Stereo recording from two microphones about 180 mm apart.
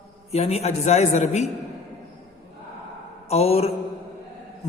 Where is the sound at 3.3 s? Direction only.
35° left (ahead or behind).